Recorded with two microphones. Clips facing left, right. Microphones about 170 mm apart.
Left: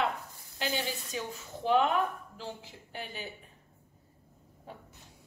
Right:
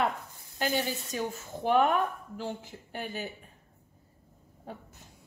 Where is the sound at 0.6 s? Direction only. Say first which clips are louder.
Right 4 dB; 50° right (ahead or behind).